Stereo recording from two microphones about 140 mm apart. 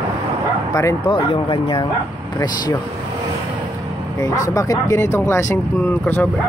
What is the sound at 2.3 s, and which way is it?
Speech, 25° left (ahead or behind).